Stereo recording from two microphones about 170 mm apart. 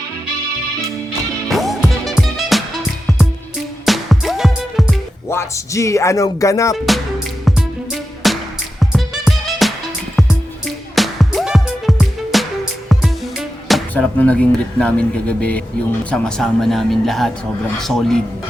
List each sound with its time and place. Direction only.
1.5 s music: centre (ahead or behind)
3.8 s music: centre (ahead or behind)
5.3 s speech: 15° left (ahead or behind)
6.7 s speech: centre (ahead or behind)
8.2 s music: centre (ahead or behind)
10.9 s music: centre (ahead or behind)
13.7 s music: 5° left (ahead or behind)
14.8 s speech: 5° left (ahead or behind)